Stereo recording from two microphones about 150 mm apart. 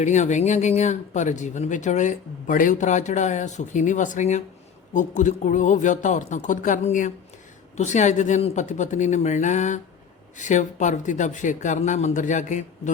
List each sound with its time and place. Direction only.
0.0 s speech: 55° left (ahead or behind)